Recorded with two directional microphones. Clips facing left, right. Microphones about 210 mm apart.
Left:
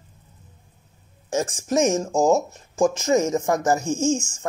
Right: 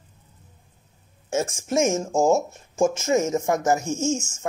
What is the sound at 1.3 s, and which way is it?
Speech, 25° right (ahead or behind).